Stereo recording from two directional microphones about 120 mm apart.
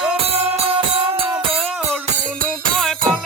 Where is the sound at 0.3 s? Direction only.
50° right (ahead or behind).